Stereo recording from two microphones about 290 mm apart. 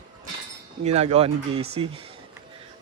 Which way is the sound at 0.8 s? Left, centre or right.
Right.